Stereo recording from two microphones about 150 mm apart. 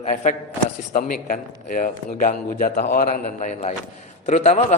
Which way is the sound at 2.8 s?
75° left (ahead or behind).